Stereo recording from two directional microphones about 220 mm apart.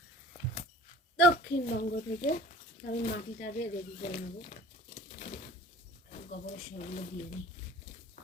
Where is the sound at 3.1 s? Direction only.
45° left (ahead or behind).